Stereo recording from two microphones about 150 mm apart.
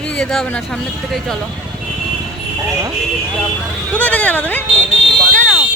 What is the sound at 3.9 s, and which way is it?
Speech, 10° left (ahead or behind).